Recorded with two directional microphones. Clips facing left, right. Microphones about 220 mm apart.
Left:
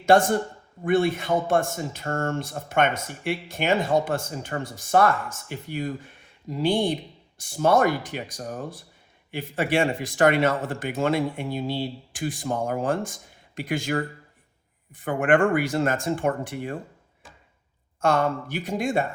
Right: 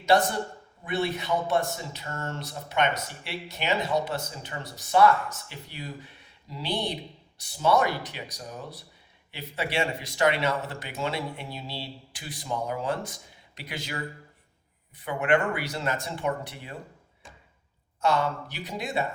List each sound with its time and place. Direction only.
0.0 s a man's voice: 50° left (ahead or behind)
18.0 s a man's voice: 50° left (ahead or behind)